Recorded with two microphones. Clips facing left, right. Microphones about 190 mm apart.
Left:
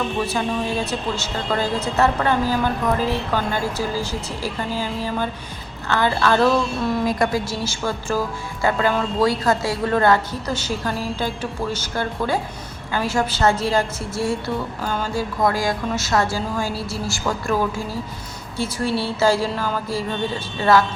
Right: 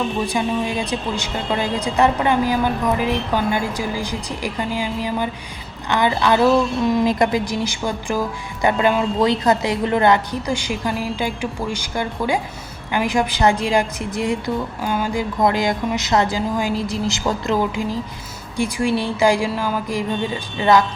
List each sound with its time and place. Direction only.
0.3 s a woman's voice: 15° right (ahead or behind)